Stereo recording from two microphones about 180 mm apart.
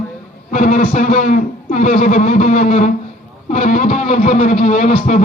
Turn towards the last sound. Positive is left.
turn(degrees=45)  # may be behind; listen again after turning